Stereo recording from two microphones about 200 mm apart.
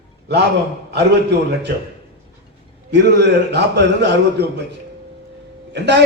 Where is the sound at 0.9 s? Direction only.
55° right (ahead or behind).